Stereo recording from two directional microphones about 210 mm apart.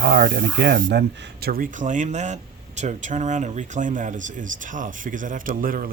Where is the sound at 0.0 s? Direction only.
50° right (ahead or behind).